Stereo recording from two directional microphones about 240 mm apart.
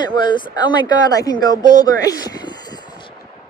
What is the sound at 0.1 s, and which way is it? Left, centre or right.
Speech, centre.